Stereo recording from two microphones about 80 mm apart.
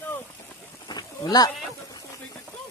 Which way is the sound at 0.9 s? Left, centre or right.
Left.